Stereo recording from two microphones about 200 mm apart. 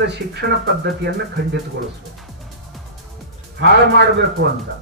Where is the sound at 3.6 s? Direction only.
60° right (ahead or behind).